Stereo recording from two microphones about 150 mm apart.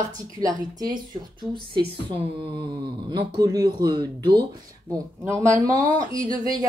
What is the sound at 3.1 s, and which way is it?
Speech, 25° right (ahead or behind).